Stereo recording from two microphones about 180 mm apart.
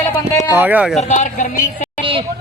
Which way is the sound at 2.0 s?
30° right (ahead or behind).